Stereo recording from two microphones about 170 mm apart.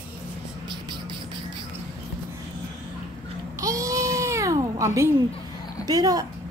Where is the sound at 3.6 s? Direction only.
20° right (ahead or behind).